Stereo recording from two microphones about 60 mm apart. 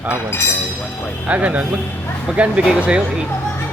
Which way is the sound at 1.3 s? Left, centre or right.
Right.